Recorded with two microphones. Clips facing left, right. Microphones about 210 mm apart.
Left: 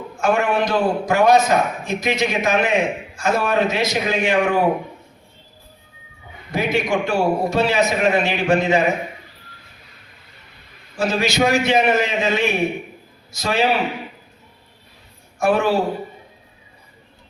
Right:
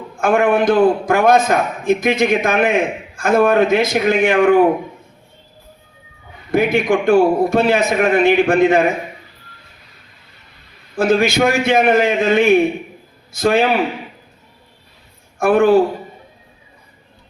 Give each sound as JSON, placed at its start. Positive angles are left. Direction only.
{"t": 0.2, "sound": "a man's voice", "side_deg": -55}
{"t": 6.5, "sound": "a man's voice", "side_deg": -55}
{"t": 10.9, "sound": "a man's voice", "side_deg": -55}
{"t": 15.4, "sound": "a man's voice", "side_deg": -55}